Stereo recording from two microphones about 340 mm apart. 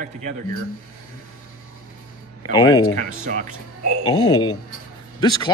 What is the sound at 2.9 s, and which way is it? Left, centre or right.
Speech, right.